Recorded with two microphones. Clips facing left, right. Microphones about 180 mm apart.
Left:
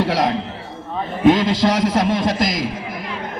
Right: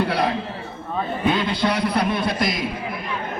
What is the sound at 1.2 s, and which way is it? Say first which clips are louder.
A man's voice: left 8 dB; 90° left.